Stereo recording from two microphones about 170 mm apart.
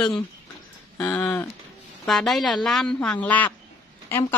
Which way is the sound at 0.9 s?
15° left (ahead or behind).